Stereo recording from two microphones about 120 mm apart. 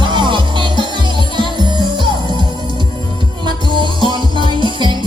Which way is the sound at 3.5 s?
40° right (ahead or behind).